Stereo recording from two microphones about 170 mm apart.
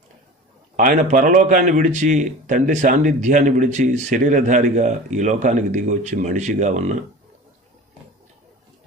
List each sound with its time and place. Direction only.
0.8 s a man's voice: 55° right (ahead or behind)